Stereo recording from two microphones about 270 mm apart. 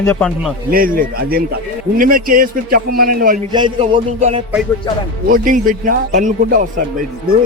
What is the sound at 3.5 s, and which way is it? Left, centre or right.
A man's voice, centre.